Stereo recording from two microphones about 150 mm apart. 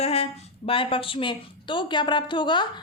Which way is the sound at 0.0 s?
45° left (ahead or behind).